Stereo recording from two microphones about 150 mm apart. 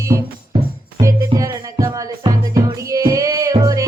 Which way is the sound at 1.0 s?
20° right (ahead or behind).